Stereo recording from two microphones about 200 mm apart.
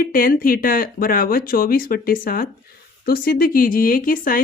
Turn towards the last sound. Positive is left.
turn(degrees=45)  # may be behind; listen again after turning